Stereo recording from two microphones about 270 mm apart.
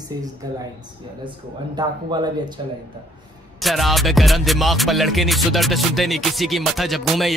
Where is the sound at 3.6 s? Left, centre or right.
Centre.